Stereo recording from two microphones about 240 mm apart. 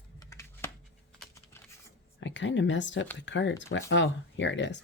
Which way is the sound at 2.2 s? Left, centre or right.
Left.